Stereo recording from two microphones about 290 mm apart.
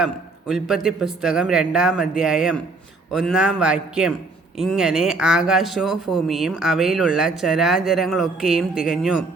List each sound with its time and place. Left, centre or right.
0.0 s speech: centre